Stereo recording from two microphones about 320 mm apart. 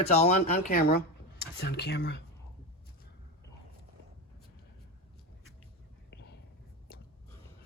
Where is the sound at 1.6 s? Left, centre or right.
Left.